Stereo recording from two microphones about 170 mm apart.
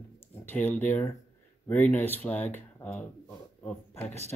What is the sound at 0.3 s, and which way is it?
Speech, 10° left (ahead or behind).